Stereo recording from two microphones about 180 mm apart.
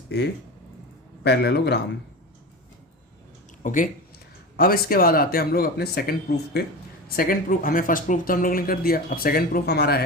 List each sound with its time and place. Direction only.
1.2 s speech: 65° left (ahead or behind)
3.6 s speech: 45° left (ahead or behind); by 10.0 s 65° left (ahead or behind)